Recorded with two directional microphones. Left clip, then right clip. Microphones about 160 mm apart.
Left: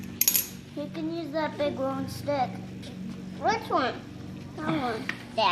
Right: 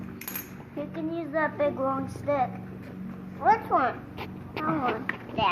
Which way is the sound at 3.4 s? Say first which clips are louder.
Right 3 dB; 45° left (ahead or behind).